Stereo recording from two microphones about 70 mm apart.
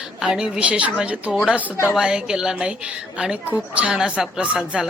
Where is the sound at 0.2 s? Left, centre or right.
Centre.